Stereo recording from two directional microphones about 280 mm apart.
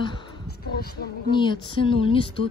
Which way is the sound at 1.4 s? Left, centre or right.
Centre.